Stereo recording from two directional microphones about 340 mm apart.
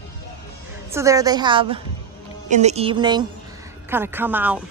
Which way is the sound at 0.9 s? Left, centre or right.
Centre.